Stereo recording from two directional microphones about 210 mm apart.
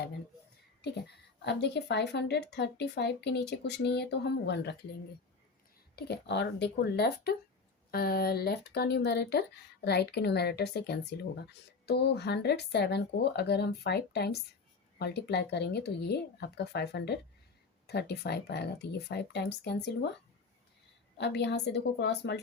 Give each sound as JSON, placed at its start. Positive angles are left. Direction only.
{"t": 0.8, "sound": "a woman's voice", "side_deg": 50}
{"t": 6.0, "sound": "a woman's voice", "side_deg": 55}
{"t": 21.2, "sound": "a woman's voice", "side_deg": 55}